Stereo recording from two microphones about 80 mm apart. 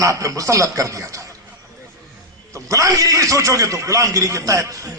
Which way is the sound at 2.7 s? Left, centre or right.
Right.